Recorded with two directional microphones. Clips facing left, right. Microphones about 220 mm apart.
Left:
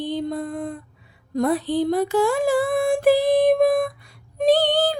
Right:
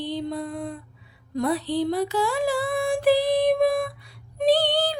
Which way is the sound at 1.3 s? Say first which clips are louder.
Left 3 dB; 50° left (ahead or behind).